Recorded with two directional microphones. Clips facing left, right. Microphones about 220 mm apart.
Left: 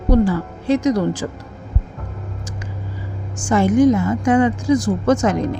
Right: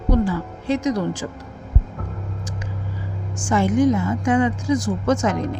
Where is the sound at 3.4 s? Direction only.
40° left (ahead or behind).